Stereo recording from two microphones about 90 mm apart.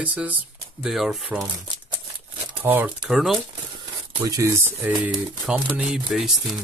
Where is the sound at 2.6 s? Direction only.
20° right (ahead or behind).